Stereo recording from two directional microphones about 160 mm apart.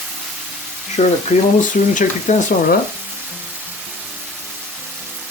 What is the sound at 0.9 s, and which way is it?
Speech, 45° left (ahead or behind).